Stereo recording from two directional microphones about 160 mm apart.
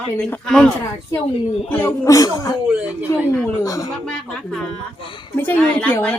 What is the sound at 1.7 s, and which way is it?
Speech, 15° left (ahead or behind).